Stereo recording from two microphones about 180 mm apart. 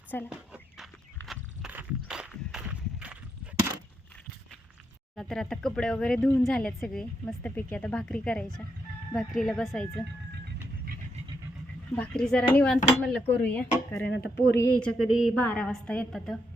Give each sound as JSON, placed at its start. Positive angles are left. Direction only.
{"t": 0.3, "sound": "walk", "side_deg": -5}
{"t": 5.1, "sound": "speech", "side_deg": 0}
{"t": 11.9, "sound": "speech", "side_deg": 5}
{"t": 14.1, "sound": "speech", "side_deg": 70}
{"t": 14.6, "sound": "speech", "side_deg": 5}